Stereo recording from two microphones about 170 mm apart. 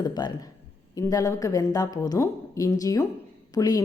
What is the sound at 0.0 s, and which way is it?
A woman's voice, 25° left (ahead or behind).